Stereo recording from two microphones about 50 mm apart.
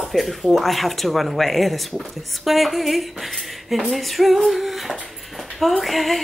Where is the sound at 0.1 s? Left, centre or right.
Centre.